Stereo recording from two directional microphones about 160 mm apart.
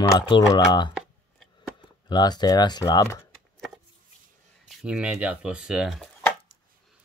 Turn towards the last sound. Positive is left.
turn(degrees=0)  # may be behind; listen again after turning